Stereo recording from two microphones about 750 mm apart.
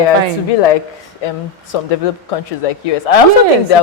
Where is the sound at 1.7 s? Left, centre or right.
Left.